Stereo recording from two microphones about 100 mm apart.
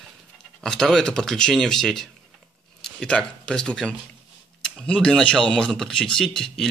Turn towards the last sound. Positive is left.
turn(degrees=5)  # may be behind; listen again after turning